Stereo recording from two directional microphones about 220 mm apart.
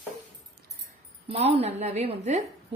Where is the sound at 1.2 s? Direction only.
25° right (ahead or behind).